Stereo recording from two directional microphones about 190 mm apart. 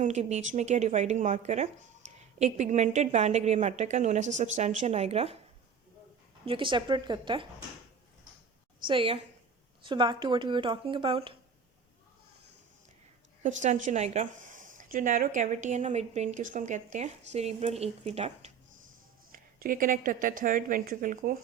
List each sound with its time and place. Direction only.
0.0 s a woman's voice: 35° right (ahead or behind)
6.4 s speech: 25° right (ahead or behind)
8.9 s speech: 30° right (ahead or behind)
13.4 s a woman's voice: 40° right (ahead or behind)
19.3 s a woman's voice: 50° right (ahead or behind)